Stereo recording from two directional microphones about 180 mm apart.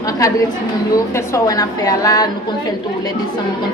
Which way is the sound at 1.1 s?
20° left (ahead or behind).